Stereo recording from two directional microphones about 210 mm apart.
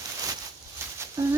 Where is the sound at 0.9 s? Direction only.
10° right (ahead or behind).